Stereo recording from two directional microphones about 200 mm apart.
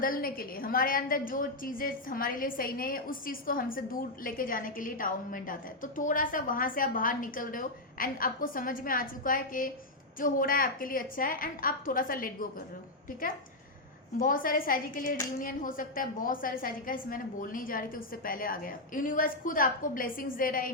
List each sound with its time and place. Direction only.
0.0 s a woman's voice: 45° left (ahead or behind)